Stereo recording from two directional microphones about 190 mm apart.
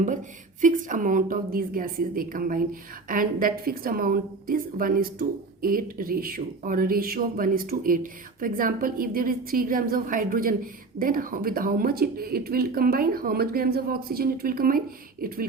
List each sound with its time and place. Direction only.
0.0 s speech: 40° right (ahead or behind)